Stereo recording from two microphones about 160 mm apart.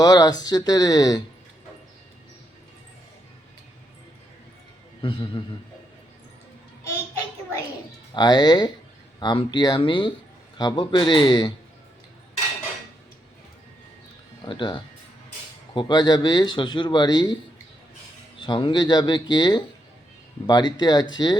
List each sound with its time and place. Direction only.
0.0 s speech: 25° left (ahead or behind)
5.0 s speech: 30° left (ahead or behind)
8.1 s speech: 25° left (ahead or behind)
14.4 s speech: 30° left (ahead or behind)
18.3 s speech: 30° left (ahead or behind)